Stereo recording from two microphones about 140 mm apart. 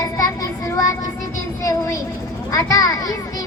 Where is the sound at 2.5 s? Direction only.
25° left (ahead or behind).